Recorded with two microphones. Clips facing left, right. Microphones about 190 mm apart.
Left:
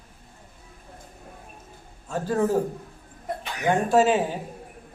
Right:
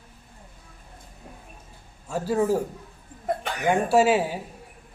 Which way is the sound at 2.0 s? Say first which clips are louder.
Right 1 dB; 10° right (ahead or behind).